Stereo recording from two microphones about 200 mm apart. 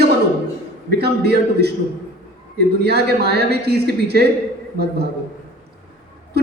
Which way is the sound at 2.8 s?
55° right (ahead or behind).